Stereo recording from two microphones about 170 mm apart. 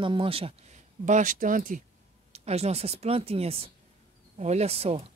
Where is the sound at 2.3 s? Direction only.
40° right (ahead or behind).